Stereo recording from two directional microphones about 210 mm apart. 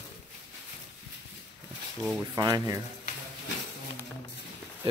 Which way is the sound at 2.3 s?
20° right (ahead or behind).